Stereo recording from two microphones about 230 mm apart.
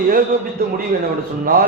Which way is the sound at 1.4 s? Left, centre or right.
Right.